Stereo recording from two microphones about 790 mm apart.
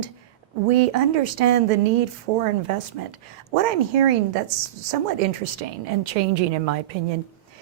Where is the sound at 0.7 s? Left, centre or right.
Right.